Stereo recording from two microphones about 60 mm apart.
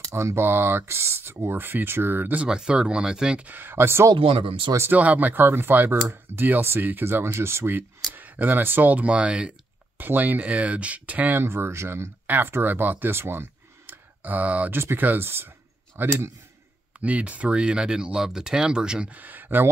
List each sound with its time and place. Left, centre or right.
0.1 s speech: right
2.4 s speech: centre
3.4 s speech: right
4.9 s speech: right
9.9 s speech: right
11.4 s speech: right
12.3 s speech: right
14.8 s speech: right
17.0 s speech: right
19.0 s speech: right